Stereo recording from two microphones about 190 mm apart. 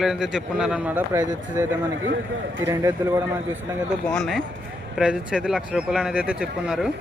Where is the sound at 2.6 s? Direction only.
15° right (ahead or behind).